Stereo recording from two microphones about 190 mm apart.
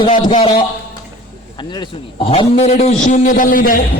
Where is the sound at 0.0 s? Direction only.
25° left (ahead or behind).